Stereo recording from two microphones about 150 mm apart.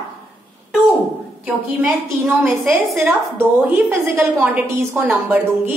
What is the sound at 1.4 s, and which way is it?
A woman's voice, 10° right (ahead or behind).